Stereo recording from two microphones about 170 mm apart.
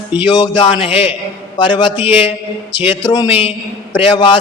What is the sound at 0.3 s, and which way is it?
Speech, 30° left (ahead or behind).